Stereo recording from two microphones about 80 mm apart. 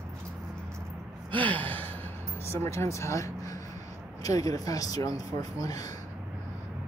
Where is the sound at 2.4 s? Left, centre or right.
Left.